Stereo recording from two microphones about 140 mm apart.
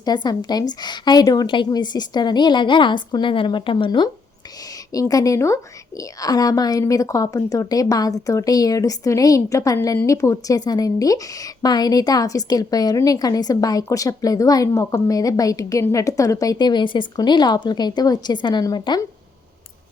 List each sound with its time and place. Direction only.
0.0 s a woman's voice: 30° left (ahead or behind)